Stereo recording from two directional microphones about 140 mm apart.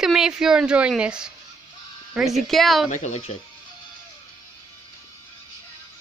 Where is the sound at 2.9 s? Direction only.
55° left (ahead or behind).